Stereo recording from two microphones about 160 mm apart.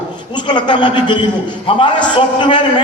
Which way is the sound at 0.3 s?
30° left (ahead or behind).